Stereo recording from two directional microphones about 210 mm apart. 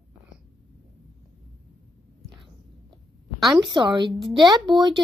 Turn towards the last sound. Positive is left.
turn(degrees=-20)  # may be behind; listen again after turning